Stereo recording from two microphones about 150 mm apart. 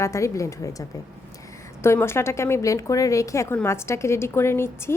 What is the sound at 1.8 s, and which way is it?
A woman's voice, 15° left (ahead or behind).